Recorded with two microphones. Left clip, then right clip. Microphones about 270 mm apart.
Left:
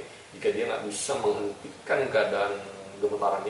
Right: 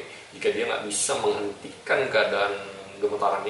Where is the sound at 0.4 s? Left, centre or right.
Centre.